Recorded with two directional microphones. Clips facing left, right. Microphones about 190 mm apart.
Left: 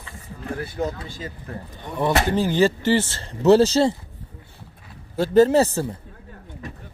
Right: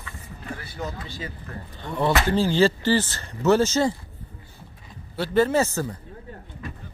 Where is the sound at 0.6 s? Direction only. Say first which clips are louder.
Left 8 dB; 50° left (ahead or behind).